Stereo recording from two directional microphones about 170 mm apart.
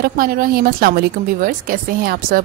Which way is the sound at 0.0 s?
60° right (ahead or behind).